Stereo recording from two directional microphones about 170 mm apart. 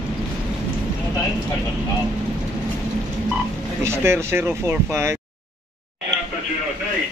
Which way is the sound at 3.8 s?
15° right (ahead or behind).